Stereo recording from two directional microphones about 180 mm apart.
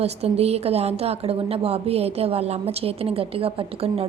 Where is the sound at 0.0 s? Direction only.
35° right (ahead or behind).